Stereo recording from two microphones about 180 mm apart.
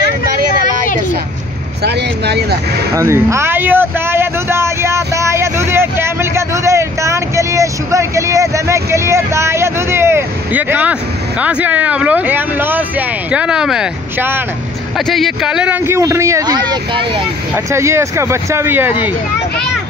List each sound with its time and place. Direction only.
1.8 s speech: 65° right (ahead or behind)
2.9 s speech: 15° right (ahead or behind)
15.0 s speech: centre (ahead or behind); by 17.2 s 30° right (ahead or behind)
17.6 s speech: 15° right (ahead or behind)